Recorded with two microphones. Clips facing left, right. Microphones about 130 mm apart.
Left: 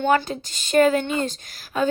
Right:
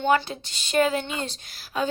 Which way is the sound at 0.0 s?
45° left (ahead or behind).